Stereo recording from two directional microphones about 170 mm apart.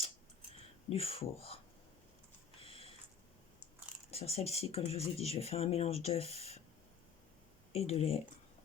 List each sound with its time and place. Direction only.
0.9 s speech: 35° left (ahead or behind)
2.6 s a sound: 35° left (ahead or behind)
4.1 s speech: 35° left (ahead or behind)
7.7 s speech: 35° left (ahead or behind)